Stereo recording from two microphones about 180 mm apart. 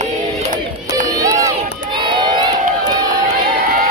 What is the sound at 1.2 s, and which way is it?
Run, 15° right (ahead or behind).